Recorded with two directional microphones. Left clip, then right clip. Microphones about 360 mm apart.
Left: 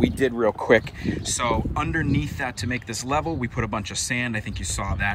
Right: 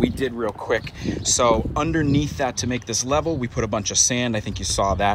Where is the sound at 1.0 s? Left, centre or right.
Centre.